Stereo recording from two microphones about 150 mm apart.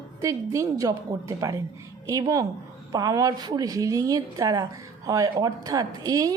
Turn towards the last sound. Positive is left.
turn(degrees=-25)  # may be behind; listen again after turning